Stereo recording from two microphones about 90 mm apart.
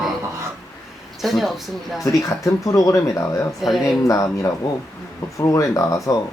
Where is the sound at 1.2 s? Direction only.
Centre (ahead or behind).